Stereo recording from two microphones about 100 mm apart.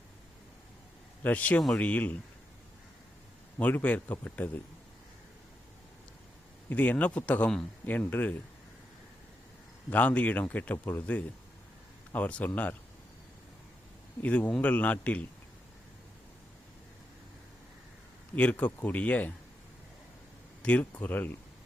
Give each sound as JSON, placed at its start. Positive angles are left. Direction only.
{"t": 1.2, "sound": "speech", "side_deg": 15}
{"t": 3.6, "sound": "speech", "side_deg": 15}
{"t": 6.7, "sound": "speech", "side_deg": 15}
{"t": 9.9, "sound": "speech", "side_deg": 15}
{"t": 14.2, "sound": "speech", "side_deg": 15}
{"t": 18.3, "sound": "speech", "side_deg": 15}
{"t": 20.6, "sound": "speech", "side_deg": 15}